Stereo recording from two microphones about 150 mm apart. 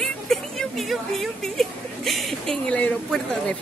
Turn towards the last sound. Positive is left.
turn(degrees=5)  # may be behind; listen again after turning